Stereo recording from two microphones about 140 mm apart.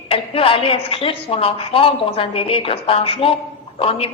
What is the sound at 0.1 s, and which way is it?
Speech, 40° left (ahead or behind).